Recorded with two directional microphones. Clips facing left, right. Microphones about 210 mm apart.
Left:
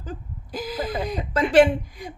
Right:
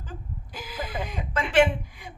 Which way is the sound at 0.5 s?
40° left (ahead or behind).